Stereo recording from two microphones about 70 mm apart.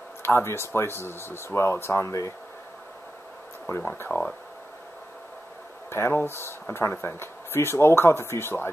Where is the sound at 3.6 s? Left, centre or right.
Left.